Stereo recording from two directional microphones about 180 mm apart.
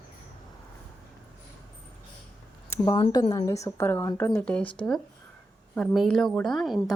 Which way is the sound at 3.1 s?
25° left (ahead or behind).